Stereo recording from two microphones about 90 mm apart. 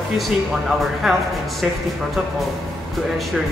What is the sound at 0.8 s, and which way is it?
Speech, 5° right (ahead or behind).